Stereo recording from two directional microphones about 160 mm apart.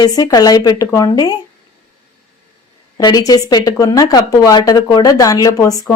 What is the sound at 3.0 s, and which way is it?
A woman's voice, 25° left (ahead or behind).